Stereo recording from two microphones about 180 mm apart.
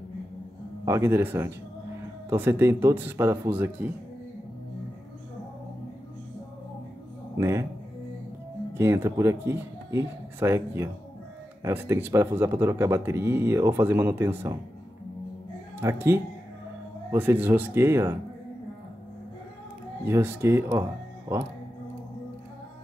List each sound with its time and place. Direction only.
0.8 s speech: 15° right (ahead or behind)
7.3 s speech: 15° right (ahead or behind)
8.7 s speech: 15° right (ahead or behind)
15.8 s speech: 15° right (ahead or behind)
20.1 s speech: 15° right (ahead or behind)